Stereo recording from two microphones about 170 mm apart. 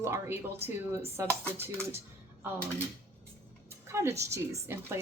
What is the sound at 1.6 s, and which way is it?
Speech, 15° right (ahead or behind).